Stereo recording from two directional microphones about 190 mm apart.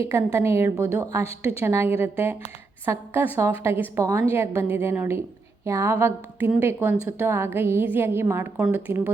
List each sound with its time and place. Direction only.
0.1 s a woman's voice: 15° right (ahead or behind)
1.2 s a woman's voice: 30° left (ahead or behind)
1.6 s a woman's voice: 15° right (ahead or behind)